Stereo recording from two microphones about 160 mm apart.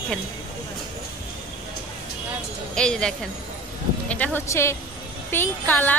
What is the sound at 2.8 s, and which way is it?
A woman's voice, 5° left (ahead or behind).